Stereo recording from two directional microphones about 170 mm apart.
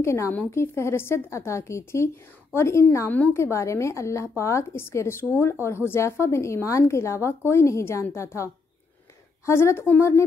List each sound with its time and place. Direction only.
0.0 s a woman's voice: 15° left (ahead or behind)
9.5 s a woman's voice: 15° left (ahead or behind)